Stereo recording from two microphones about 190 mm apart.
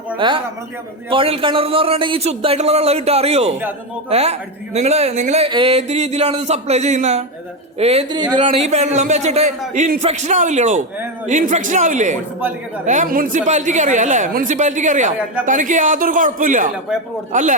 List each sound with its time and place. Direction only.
0.2 s a man's voice: 25° right (ahead or behind)
12.4 s a man's voice: 10° right (ahead or behind)
12.8 s a man's voice: 40° right (ahead or behind)